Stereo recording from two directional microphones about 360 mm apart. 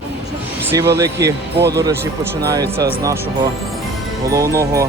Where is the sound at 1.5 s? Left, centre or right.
Right.